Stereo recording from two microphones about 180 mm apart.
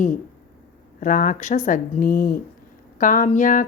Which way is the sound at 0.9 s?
50° left (ahead or behind).